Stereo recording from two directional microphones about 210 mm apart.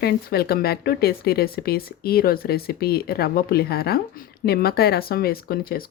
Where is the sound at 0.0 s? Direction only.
50° left (ahead or behind).